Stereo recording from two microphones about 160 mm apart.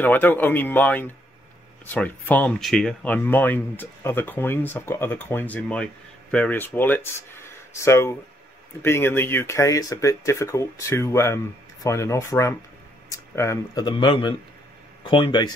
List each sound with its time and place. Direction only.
0.0 s speech: 10° left (ahead or behind); by 15.5 s 30° left (ahead or behind)